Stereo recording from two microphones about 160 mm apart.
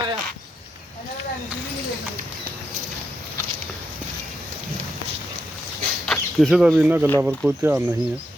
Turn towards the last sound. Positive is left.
turn(degrees=-5)  # may be behind; listen again after turning